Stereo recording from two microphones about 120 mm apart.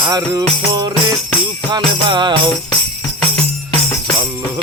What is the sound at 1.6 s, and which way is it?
Music, 40° right (ahead or behind).